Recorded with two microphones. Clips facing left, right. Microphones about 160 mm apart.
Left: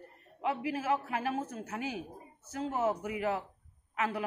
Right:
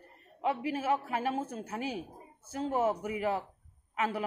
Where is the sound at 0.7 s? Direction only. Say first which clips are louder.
Right 1 dB; 30° right (ahead or behind).